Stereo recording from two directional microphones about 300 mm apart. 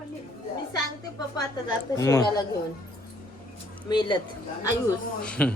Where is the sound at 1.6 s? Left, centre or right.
Centre.